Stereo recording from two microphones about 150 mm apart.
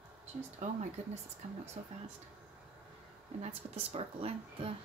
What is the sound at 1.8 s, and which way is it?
Speech, 50° right (ahead or behind).